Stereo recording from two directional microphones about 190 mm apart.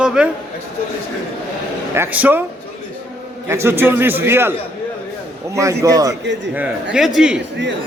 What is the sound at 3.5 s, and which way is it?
A man's voice, 15° right (ahead or behind).